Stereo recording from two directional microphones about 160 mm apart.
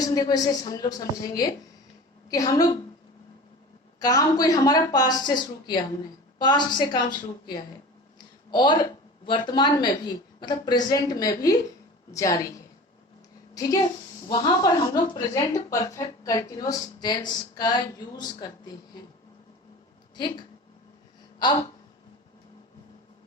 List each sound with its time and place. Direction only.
0.0 s a woman's voice: 25° left (ahead or behind)
4.0 s a woman's voice: 25° left (ahead or behind)
8.4 s a woman's voice: 30° left (ahead or behind)
13.5 s a woman's voice: 20° left (ahead or behind)
20.1 s a woman's voice: 30° left (ahead or behind)